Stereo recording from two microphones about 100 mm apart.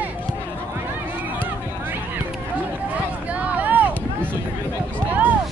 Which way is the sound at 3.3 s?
15° right (ahead or behind).